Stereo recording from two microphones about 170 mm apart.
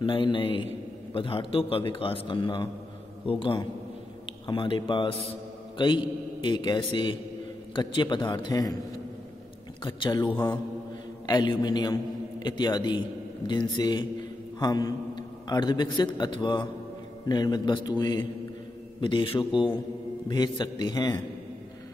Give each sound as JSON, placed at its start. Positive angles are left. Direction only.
{"t": 0.0, "sound": "a man's voice", "side_deg": 30}